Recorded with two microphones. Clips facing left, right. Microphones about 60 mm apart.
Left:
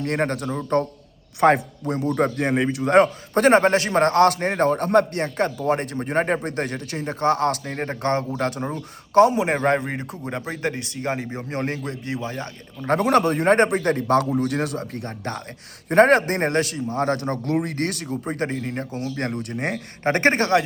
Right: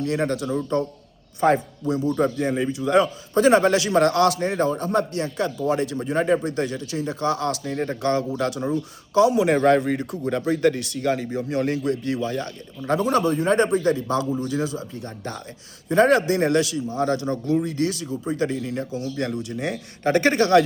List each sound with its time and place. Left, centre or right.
0.0 s a man's voice: left
1.4 s a man's voice: left
9.3 s speech: left
12.9 s a man's voice: left